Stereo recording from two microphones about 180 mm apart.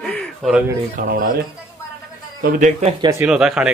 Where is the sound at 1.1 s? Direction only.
50° right (ahead or behind).